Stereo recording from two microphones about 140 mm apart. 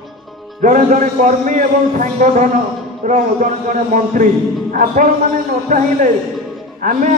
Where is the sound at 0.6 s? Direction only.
70° right (ahead or behind).